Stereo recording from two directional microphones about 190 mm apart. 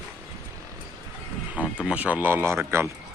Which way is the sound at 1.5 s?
5° right (ahead or behind).